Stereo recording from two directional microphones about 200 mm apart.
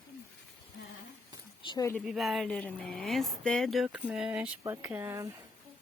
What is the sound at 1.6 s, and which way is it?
Speech, 20° left (ahead or behind).